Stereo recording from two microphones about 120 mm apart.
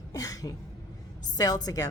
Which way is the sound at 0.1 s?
30° left (ahead or behind).